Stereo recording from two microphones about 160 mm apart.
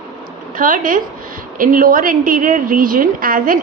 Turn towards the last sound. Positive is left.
turn(degrees=-60)  # may be behind; listen again after turning